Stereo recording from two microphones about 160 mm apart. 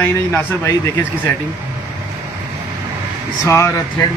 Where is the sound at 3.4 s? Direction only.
15° left (ahead or behind).